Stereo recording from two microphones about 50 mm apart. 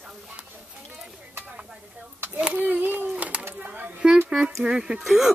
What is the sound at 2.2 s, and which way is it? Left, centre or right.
Speech, right.